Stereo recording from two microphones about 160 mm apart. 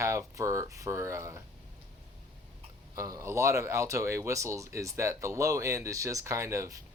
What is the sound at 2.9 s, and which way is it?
Speech, 20° right (ahead or behind).